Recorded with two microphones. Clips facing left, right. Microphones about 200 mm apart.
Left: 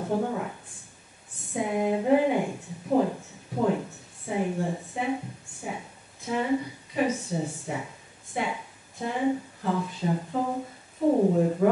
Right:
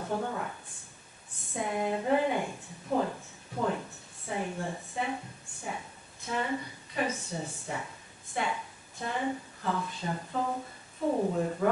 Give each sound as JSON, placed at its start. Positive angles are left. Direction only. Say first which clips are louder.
{"t": 0.0, "sound": "a woman's voice", "louder": "left 5 dB", "side_deg": 15}
{"t": 1.5, "sound": "a woman's voice", "louder": "left 5 dB", "side_deg": 10}
{"t": 6.2, "sound": "a woman's voice", "louder": "left 6 dB", "side_deg": 10}